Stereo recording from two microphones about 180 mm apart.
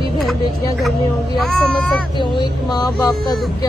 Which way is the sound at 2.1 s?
25° left (ahead or behind).